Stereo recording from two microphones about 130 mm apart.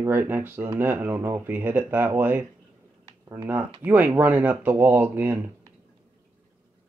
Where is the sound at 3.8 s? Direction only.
10° right (ahead or behind).